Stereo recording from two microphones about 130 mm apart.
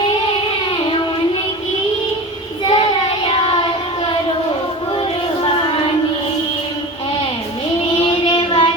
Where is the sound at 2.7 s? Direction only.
40° left (ahead or behind).